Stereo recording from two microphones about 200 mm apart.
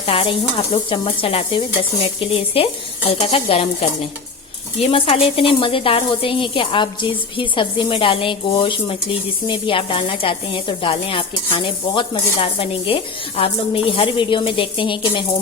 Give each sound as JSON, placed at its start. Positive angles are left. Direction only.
{"t": 0.0, "sound": "a woman's voice", "side_deg": 25}